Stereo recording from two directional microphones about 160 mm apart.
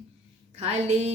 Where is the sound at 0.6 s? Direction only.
40° right (ahead or behind).